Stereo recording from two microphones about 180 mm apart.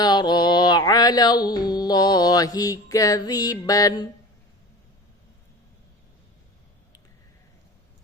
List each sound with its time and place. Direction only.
0.0 s music: 25° left (ahead or behind)